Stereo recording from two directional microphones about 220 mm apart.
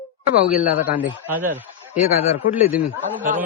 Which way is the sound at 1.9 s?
35° left (ahead or behind).